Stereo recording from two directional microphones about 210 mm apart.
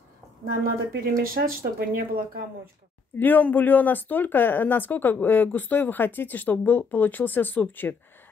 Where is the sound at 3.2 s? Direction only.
10° left (ahead or behind).